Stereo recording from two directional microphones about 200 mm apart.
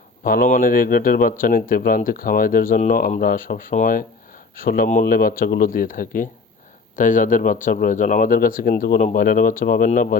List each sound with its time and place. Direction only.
0.3 s speech: 40° left (ahead or behind)